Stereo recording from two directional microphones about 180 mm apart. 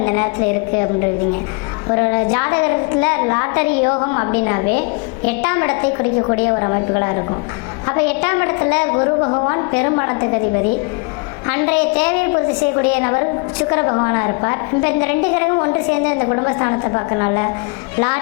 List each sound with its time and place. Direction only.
0.0 s a sound: 20° left (ahead or behind)
1.9 s a woman's voice: 20° left (ahead or behind)
4.7 s a woman's voice: 50° left (ahead or behind)
5.4 s a woman's voice: 20° left (ahead or behind)
11.4 s a woman's voice: 15° left (ahead or behind)